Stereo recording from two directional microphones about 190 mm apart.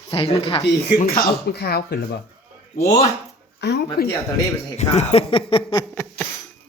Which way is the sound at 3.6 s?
55° left (ahead or behind).